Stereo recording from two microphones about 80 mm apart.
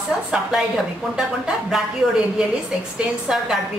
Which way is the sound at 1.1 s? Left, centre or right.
Centre.